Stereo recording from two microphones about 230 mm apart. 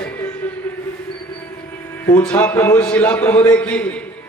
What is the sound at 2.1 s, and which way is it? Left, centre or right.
A man's voice, centre.